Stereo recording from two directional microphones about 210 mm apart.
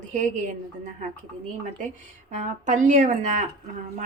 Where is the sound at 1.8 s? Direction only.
35° right (ahead or behind).